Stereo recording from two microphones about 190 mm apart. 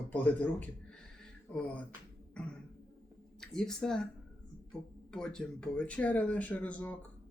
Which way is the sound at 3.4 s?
5° left (ahead or behind).